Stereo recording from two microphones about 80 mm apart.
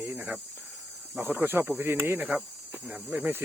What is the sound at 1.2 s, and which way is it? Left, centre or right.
Speech, right.